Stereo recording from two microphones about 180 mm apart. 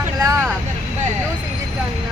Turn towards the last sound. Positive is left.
turn(degrees=-20)  # may be behind; listen again after turning